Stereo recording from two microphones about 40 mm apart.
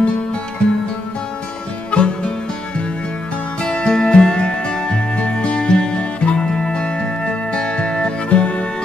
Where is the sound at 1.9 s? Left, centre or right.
Left.